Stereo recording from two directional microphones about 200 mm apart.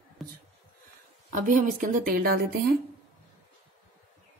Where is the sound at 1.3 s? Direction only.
40° right (ahead or behind).